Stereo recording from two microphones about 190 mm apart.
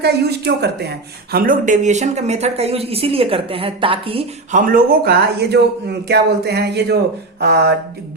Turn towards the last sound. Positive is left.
turn(degrees=-55)  # may be behind; listen again after turning